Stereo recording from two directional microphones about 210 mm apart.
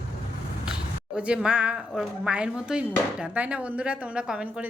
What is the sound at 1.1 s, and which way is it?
Speech, 5° right (ahead or behind).